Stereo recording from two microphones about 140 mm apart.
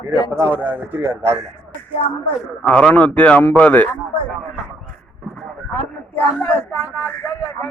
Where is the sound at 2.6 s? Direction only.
5° left (ahead or behind).